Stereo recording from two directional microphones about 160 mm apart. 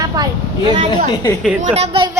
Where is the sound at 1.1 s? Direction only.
20° left (ahead or behind).